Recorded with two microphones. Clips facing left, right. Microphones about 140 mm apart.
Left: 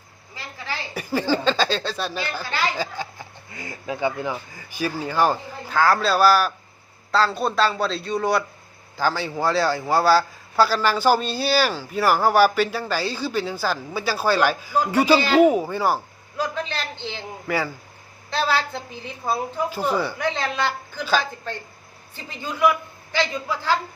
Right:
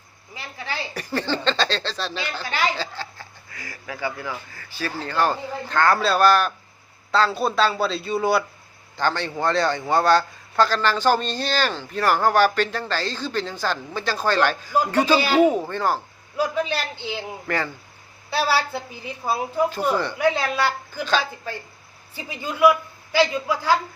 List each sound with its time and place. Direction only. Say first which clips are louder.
0.3 s a woman's voice: even; 15° right (ahead or behind)
0.9 s a man's voice: left 4 dB; 10° left (ahead or behind)
2.4 s a woman's voice: right 2 dB; 15° right (ahead or behind)
2.7 s a man's voice: left 3 dB; 15° left (ahead or behind)
16.4 s a woman's voice: right 3 dB; 10° right (ahead or behind)
17.5 s a man's voice: left 1 dB; 5° left (ahead or behind)
18.3 s a woman's voice: right 1 dB; 5° right (ahead or behind)
19.9 s a man's voice: even; 5° left (ahead or behind)
20.1 s a woman's voice: right 3 dB; 5° right (ahead or behind)
22.1 s a woman's voice: right 1 dB; 10° right (ahead or behind)